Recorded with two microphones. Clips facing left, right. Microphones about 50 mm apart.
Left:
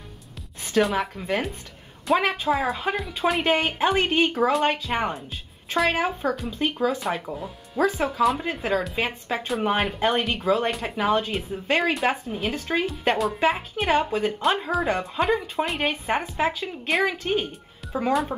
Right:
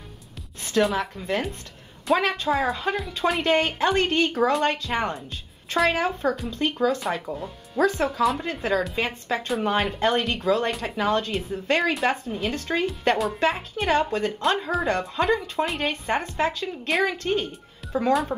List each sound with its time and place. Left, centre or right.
0.9 s speech: left
2.1 s speech: centre